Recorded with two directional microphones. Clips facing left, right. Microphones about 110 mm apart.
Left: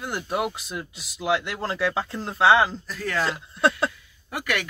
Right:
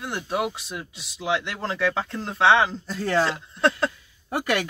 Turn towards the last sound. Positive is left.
turn(degrees=-35)  # may be behind; listen again after turning